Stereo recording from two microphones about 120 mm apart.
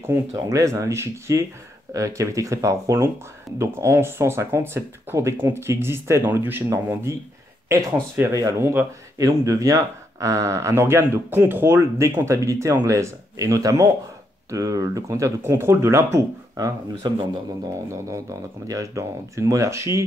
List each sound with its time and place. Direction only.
0.0 s speech: 25° right (ahead or behind)